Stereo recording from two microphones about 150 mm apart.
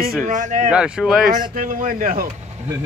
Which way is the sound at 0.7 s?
5° right (ahead or behind).